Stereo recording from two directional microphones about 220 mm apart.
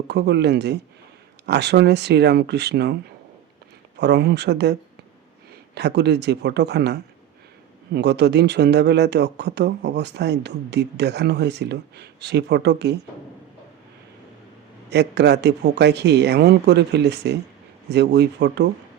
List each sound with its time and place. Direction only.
0.1 s speech: 50° right (ahead or behind)
14.8 s speech: 50° right (ahead or behind)